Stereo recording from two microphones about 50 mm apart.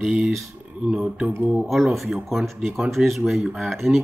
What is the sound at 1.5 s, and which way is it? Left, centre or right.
Speech, centre.